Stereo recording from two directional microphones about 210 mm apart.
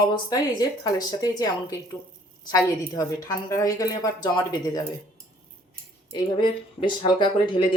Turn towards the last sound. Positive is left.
turn(degrees=25)  # may be behind; listen again after turning